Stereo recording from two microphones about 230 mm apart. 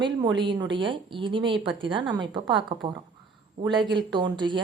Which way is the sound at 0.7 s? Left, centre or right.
Right.